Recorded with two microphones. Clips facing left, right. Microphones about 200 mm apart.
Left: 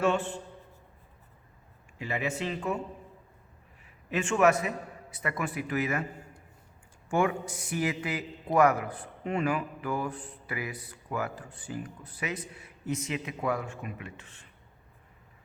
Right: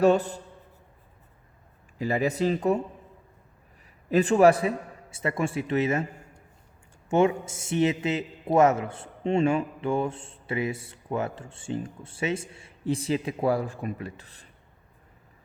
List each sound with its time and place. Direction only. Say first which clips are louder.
0.0 s speech: right 7 dB; 40° right (ahead or behind)
2.0 s speech: right 7 dB; 35° right (ahead or behind)
4.1 s a man's voice: right 6 dB; 35° right (ahead or behind)
7.1 s a man's voice: right 5 dB; 25° right (ahead or behind)